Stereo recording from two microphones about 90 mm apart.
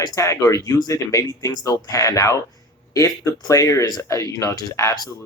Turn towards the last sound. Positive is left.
turn(degrees=40)  # may be behind; listen again after turning